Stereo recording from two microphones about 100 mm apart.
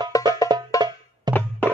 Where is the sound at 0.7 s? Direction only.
35° left (ahead or behind).